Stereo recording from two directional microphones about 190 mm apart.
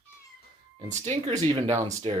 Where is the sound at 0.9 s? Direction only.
35° right (ahead or behind).